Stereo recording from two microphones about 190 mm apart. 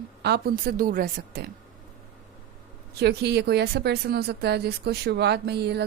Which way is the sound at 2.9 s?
60° right (ahead or behind).